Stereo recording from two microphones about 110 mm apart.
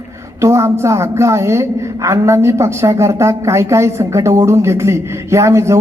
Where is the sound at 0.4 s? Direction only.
25° right (ahead or behind).